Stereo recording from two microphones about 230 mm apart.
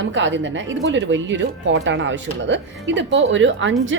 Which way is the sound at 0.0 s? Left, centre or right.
Right.